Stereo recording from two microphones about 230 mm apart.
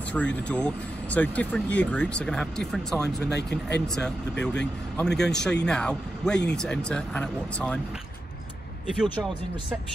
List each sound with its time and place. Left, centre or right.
0.1 s speech: centre
3.2 s speech: left
3.8 s speech: centre